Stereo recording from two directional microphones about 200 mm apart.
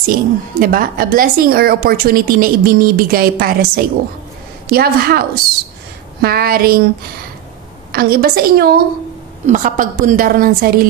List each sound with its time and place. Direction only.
0.0 s a woman's voice: 45° right (ahead or behind)
7.9 s a woman's voice: 50° right (ahead or behind)